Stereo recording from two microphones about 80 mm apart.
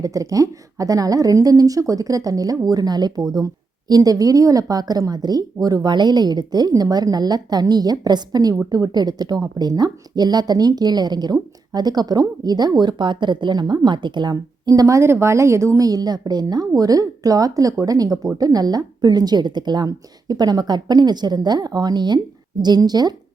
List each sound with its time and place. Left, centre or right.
0.0 s a woman's voice: right
15.9 s a woman's voice: right